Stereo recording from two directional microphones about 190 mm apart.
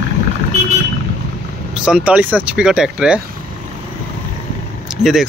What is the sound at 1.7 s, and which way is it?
Speech, 5° right (ahead or behind).